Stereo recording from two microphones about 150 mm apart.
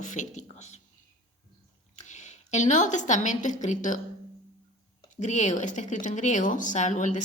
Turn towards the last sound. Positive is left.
turn(degrees=55)  # may be behind; listen again after turning